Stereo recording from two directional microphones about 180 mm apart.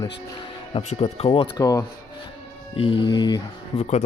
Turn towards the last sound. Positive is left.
turn(degrees=40)  # may be behind; listen again after turning